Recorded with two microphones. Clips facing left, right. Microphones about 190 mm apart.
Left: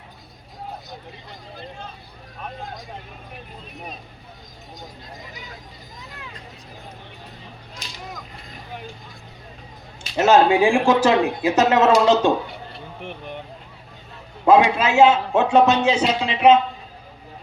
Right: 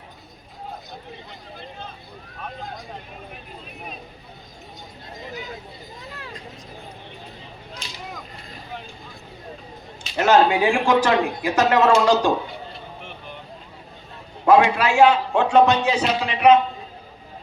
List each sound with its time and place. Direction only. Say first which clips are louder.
10.2 s speech: left 2 dB; 25° left (ahead or behind)
14.4 s speech: left 1 dB; 20° left (ahead or behind)